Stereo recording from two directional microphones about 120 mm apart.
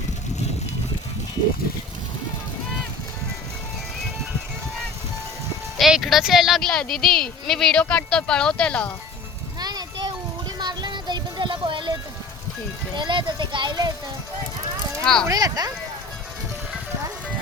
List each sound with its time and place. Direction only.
5.7 s speech: centre (ahead or behind)
9.6 s music: 35° right (ahead or behind)
13.0 s speech: 40° right (ahead or behind)
15.0 s speech: 5° left (ahead or behind)
15.3 s speech: 30° right (ahead or behind)